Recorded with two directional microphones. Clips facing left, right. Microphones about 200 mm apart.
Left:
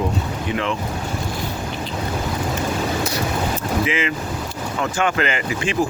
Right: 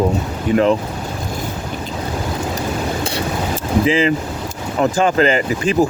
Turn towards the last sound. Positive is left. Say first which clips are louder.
# right 6 dB
turn(degrees=-40)  # may be behind; listen again after turning